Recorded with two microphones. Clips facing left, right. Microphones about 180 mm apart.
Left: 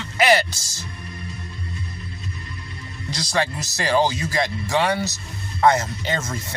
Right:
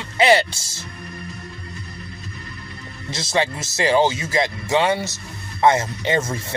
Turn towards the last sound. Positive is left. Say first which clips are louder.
# right 5 dB
turn(degrees=-30)  # may be behind; listen again after turning